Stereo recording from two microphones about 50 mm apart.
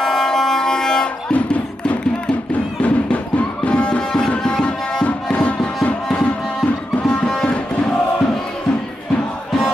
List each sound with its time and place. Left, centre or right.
0.0 s a sound: centre
1.3 s music: left
5.0 s music: left